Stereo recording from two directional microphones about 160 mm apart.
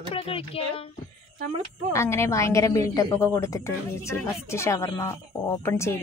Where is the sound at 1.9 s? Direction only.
15° left (ahead or behind).